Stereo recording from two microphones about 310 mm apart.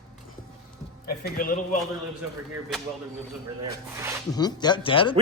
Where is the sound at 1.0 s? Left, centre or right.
Left.